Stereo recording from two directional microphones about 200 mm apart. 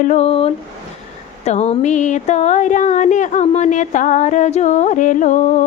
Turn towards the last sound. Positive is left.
turn(degrees=40)  # may be behind; listen again after turning